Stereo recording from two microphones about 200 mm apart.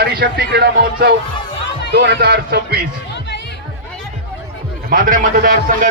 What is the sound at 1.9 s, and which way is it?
Music, 50° right (ahead or behind).